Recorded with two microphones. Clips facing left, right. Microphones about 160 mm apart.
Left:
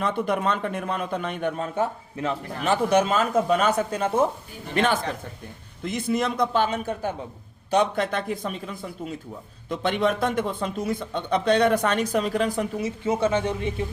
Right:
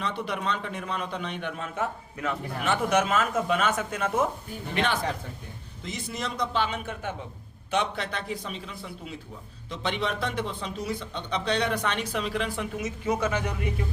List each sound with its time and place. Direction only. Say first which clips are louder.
0.0 s a man's voice: left 6 dB; 50° left (ahead or behind); by 4.3 s 30° left (ahead or behind)
4.7 s a man's voice: left 5 dB; 45° left (ahead or behind)
5.8 s a man's voice: left 9 dB; 55° left (ahead or behind); by 13.8 s 25° left (ahead or behind)